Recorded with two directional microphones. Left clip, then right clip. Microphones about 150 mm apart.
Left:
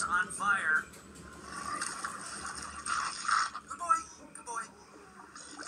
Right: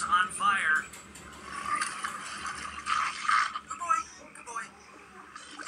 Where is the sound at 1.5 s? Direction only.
25° left (ahead or behind).